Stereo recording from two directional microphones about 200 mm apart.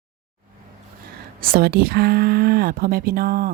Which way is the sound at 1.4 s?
45° right (ahead or behind).